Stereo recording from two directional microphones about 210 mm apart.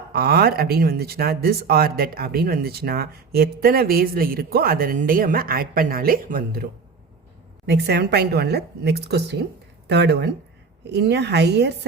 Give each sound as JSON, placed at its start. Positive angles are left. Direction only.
{"t": 0.1, "sound": "speech", "side_deg": -45}
{"t": 7.7, "sound": "speech", "side_deg": -50}